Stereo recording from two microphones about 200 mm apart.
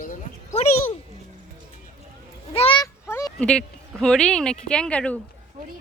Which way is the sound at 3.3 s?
5° left (ahead or behind).